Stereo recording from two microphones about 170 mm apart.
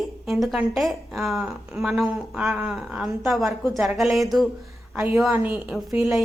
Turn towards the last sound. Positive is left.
turn(degrees=0)  # may be behind; listen again after turning